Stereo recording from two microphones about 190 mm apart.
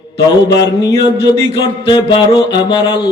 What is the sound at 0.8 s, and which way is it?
Mantra, 20° left (ahead or behind).